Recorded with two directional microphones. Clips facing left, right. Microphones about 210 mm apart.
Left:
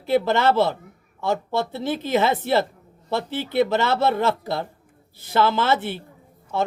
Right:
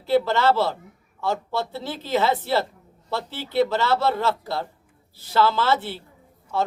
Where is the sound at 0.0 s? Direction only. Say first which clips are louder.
Left 1 dB; 20° left (ahead or behind).